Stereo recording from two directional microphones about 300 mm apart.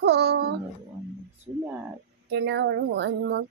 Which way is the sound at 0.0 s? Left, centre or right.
Right.